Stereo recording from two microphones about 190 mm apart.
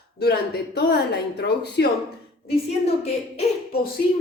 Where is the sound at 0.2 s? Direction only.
55° left (ahead or behind).